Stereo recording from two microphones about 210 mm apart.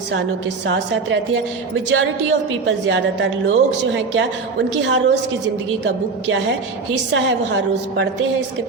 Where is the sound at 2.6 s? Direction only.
60° right (ahead or behind).